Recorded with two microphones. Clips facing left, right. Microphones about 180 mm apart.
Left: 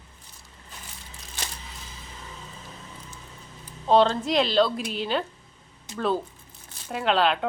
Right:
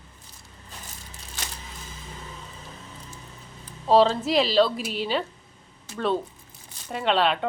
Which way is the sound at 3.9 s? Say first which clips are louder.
Right 1 dB; 5° right (ahead or behind).